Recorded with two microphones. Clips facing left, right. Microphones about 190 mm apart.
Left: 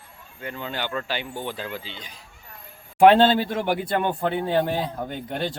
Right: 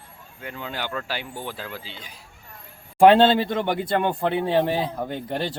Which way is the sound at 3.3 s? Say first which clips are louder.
Right 1 dB; 10° left (ahead or behind).